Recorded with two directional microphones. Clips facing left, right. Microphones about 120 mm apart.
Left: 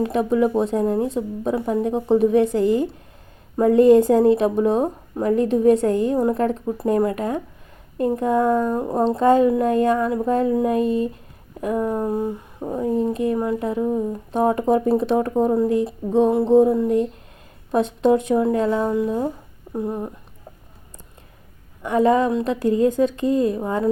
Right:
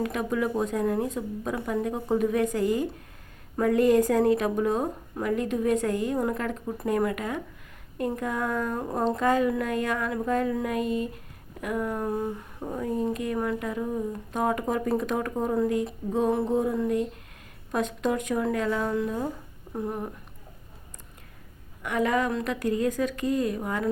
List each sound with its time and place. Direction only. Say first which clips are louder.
0.0 s a woman's voice: left 8 dB; 30° left (ahead or behind)
21.8 s a woman's voice: left 8 dB; 30° left (ahead or behind)